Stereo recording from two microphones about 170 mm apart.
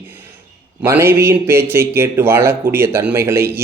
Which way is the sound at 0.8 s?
15° right (ahead or behind).